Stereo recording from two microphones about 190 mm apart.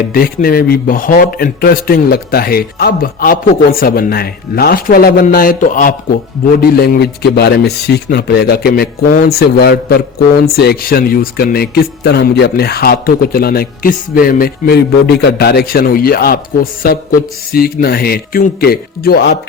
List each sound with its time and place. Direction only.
0.1 s speech: 50° left (ahead or behind)